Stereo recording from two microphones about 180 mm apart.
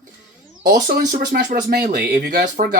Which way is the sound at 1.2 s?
70° right (ahead or behind).